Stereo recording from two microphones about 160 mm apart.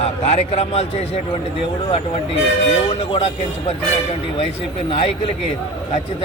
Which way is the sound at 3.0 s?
35° left (ahead or behind).